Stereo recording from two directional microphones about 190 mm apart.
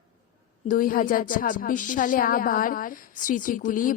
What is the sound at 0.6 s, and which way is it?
A woman's voice, 45° left (ahead or behind).